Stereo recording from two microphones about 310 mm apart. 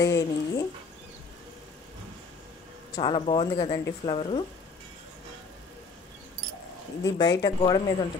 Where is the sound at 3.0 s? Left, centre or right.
Centre.